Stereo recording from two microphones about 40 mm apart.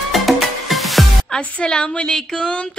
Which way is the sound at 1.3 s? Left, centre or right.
Left.